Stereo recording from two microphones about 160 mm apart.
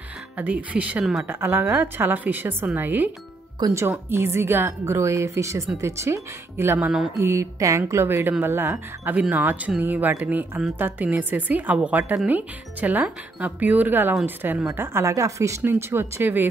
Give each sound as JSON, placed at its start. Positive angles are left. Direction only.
{"t": 0.4, "sound": "speech", "side_deg": -10}